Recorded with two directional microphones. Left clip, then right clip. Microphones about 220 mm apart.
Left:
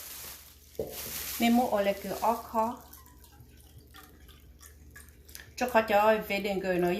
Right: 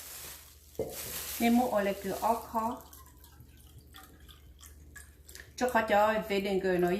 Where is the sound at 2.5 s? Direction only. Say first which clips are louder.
Left 4 dB; 30° left (ahead or behind).